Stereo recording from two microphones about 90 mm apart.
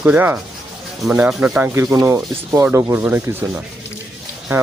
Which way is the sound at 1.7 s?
30° right (ahead or behind).